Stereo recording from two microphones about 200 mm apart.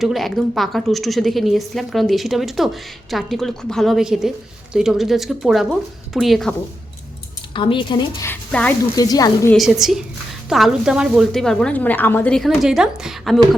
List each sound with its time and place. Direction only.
0.0 s a woman's voice: centre (ahead or behind)
7.5 s a woman's voice: 25° left (ahead or behind)
8.3 s a woman's voice: 5° left (ahead or behind)
9.0 s a woman's voice: 20° left (ahead or behind)
9.5 s a woman's voice: centre (ahead or behind)